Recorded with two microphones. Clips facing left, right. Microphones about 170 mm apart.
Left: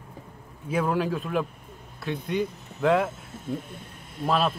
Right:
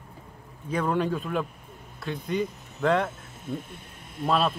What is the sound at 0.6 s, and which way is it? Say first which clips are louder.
Speech: left 1 dB; 5° left (ahead or behind).